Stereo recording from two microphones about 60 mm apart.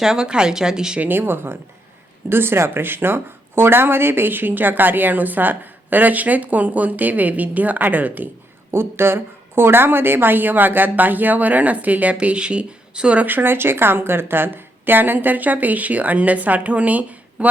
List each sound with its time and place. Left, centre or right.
0.0 s a woman's voice: centre
1.0 s speech: right
8.7 s a woman's voice: right; by 13.2 s centre
13.2 s a woman's voice: right